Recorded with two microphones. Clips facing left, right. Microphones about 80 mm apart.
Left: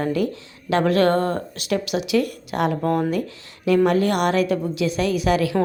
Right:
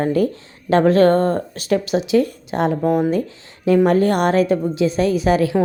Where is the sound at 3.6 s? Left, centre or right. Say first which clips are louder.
Right 3 dB; right.